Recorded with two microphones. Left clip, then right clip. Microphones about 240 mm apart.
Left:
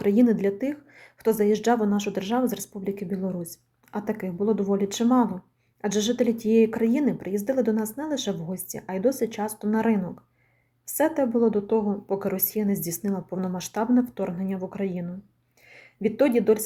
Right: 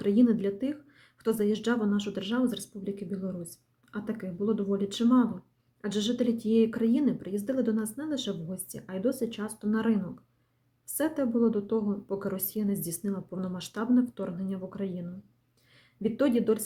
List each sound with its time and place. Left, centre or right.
0.0 s a woman's voice: centre
11.0 s a woman's voice: centre